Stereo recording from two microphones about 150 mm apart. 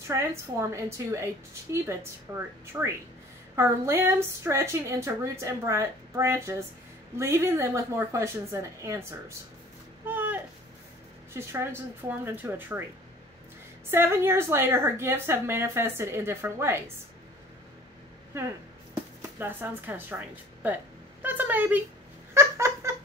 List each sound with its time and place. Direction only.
0.1 s a woman's voice: 20° right (ahead or behind)
10.0 s a sound: 15° right (ahead or behind)
11.3 s a woman's voice: 15° right (ahead or behind)
13.8 s a woman's voice: 15° right (ahead or behind)
19.3 s speech: 15° right (ahead or behind)
22.3 s laughter: 20° right (ahead or behind)